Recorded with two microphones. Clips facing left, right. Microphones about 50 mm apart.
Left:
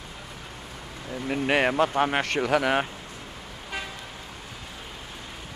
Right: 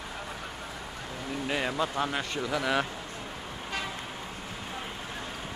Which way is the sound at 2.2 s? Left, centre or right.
Left.